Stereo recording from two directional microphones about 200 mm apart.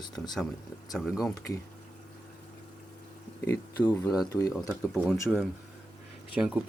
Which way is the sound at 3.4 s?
10° left (ahead or behind).